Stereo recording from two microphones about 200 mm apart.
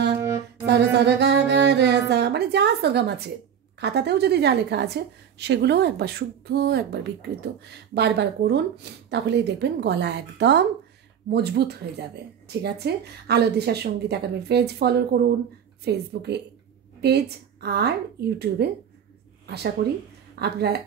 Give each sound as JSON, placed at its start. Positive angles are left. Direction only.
{"t": 0.7, "sound": "music", "side_deg": -55}
{"t": 3.8, "sound": "a woman's voice", "side_deg": -55}
{"t": 19.4, "sound": "a woman's voice", "side_deg": -55}